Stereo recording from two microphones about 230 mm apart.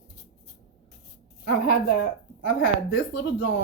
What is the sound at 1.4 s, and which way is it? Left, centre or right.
Speech, left.